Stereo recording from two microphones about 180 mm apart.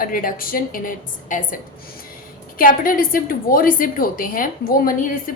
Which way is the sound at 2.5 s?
50° left (ahead or behind).